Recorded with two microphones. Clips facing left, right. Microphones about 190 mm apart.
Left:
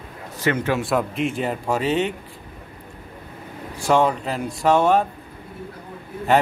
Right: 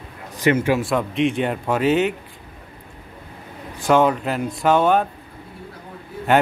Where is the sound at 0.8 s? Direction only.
Centre (ahead or behind).